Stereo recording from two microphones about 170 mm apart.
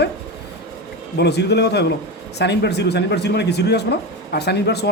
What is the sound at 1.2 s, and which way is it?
Speech, 80° left.